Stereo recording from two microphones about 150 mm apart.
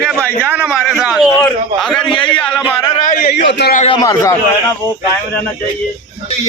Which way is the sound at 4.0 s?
20° left (ahead or behind).